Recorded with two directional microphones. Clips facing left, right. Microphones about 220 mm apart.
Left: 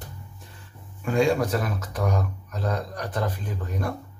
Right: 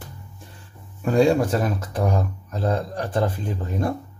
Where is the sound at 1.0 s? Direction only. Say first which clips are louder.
Right 4 dB; 35° right (ahead or behind).